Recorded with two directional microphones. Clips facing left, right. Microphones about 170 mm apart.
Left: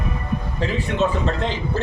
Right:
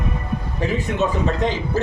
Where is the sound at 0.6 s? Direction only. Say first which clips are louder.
Even; 15° right (ahead or behind).